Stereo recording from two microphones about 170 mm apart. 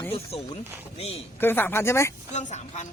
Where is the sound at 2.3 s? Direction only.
45° left (ahead or behind).